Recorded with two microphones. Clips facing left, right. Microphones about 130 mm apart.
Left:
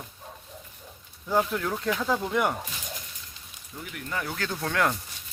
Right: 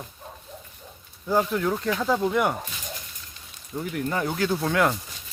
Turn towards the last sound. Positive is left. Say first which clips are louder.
# right 4 dB
turn(degrees=-5)  # may be behind; listen again after turning